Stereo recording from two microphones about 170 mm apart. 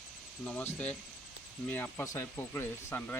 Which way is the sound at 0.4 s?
10° left (ahead or behind).